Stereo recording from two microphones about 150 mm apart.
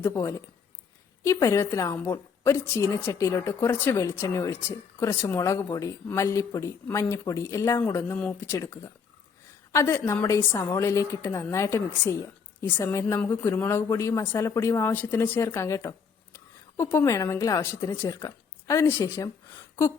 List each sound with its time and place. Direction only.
0.0 s a woman's voice: 15° left (ahead or behind)